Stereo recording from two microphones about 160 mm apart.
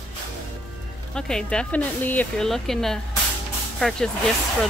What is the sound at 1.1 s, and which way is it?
A woman's voice, 5° left (ahead or behind).